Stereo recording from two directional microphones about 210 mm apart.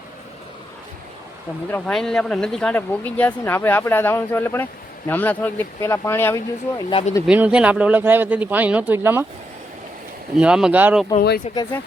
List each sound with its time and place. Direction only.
1.7 s speech: centre (ahead or behind)
7.3 s speech: 5° right (ahead or behind)
10.3 s speech: 5° right (ahead or behind)
11.5 s speech: 30° left (ahead or behind)